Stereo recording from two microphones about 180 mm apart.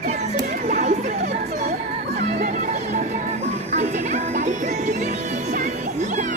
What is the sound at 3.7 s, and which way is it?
Music, 40° right (ahead or behind).